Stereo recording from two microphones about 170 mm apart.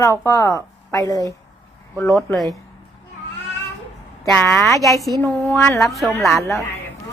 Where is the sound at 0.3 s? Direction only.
15° left (ahead or behind).